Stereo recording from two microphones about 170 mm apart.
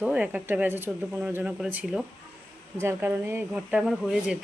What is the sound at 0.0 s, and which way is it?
Speech, 5° right (ahead or behind).